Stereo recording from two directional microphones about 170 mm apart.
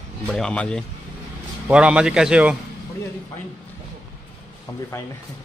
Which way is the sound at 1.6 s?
5° right (ahead or behind).